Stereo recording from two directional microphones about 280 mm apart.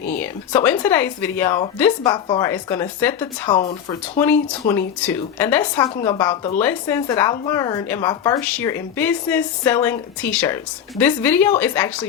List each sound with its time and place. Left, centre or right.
0.1 s speech: centre
4.2 s speech: centre